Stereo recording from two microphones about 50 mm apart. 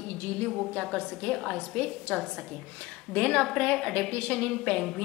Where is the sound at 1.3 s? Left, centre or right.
Centre.